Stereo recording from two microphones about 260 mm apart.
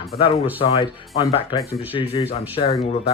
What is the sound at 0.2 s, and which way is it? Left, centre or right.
Speech, left.